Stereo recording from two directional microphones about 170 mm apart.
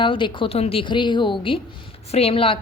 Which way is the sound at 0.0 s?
30° left (ahead or behind).